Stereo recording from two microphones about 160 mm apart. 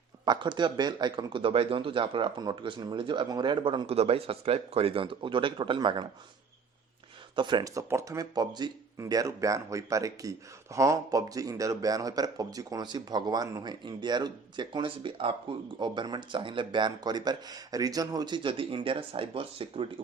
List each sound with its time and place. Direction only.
0.3 s a man's voice: 30° right (ahead or behind)
7.3 s speech: 30° right (ahead or behind)